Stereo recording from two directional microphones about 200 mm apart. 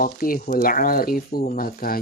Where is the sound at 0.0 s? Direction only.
45° left (ahead or behind).